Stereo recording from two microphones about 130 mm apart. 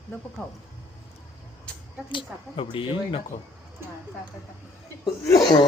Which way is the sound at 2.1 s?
40° left (ahead or behind).